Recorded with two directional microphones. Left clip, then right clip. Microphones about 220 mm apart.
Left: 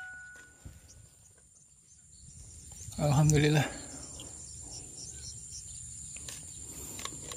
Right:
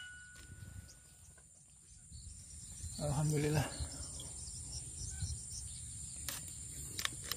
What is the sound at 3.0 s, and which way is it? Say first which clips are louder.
Cricket: left 10 dB; 50° left (ahead or behind).